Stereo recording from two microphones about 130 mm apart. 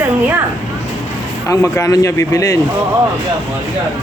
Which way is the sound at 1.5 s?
25° left (ahead or behind).